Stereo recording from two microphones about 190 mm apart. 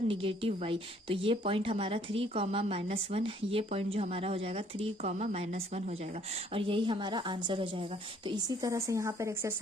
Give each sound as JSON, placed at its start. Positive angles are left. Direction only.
{"t": 0.1, "sound": "a woman's voice", "side_deg": -30}